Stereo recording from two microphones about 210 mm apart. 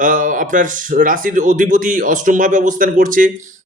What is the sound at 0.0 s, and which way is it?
A man's voice, 40° right (ahead or behind).